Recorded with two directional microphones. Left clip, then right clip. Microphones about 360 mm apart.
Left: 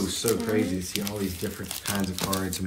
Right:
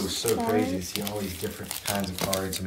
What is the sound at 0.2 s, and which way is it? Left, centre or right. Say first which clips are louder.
Speech: right 1 dB; centre.